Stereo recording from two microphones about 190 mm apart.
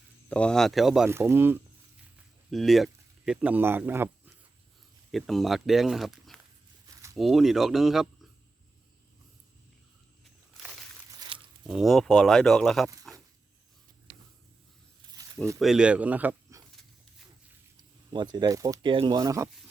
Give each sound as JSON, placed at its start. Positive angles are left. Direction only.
{"t": 0.3, "sound": "speech", "side_deg": 5}
{"t": 2.5, "sound": "speech", "side_deg": 0}
{"t": 5.1, "sound": "speech", "side_deg": 0}
{"t": 6.8, "sound": "a sound", "side_deg": -15}
{"t": 7.2, "sound": "speech", "side_deg": 0}
{"t": 11.6, "sound": "speech", "side_deg": 0}
{"t": 15.5, "sound": "speech", "side_deg": 0}
{"t": 18.1, "sound": "speech", "side_deg": -20}